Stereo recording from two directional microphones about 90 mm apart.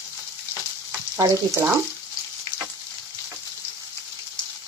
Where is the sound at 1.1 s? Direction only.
35° right (ahead or behind).